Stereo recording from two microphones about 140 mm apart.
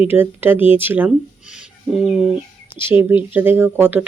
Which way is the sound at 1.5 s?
5° right (ahead or behind).